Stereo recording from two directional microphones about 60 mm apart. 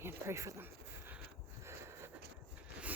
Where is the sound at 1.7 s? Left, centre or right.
Right.